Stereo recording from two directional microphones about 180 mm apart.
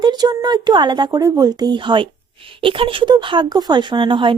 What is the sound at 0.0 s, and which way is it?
Speech, 25° right (ahead or behind).